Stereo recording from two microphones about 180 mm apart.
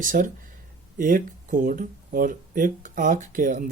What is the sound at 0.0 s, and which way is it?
Speech, 45° right (ahead or behind).